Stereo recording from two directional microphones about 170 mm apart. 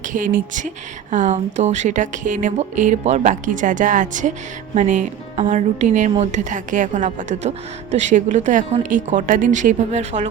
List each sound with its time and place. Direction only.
0.1 s speech: 50° right (ahead or behind)